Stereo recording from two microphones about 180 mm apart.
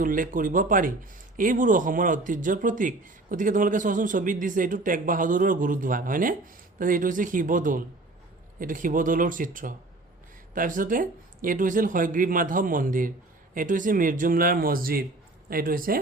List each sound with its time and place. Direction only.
0.0 s speech: 50° right (ahead or behind)